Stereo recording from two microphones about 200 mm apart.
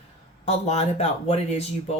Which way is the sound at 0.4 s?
35° left (ahead or behind).